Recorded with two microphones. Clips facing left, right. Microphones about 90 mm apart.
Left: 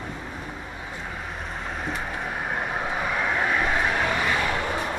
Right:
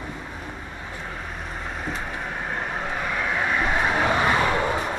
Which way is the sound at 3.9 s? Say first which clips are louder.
Right 4 dB; 25° right (ahead or behind).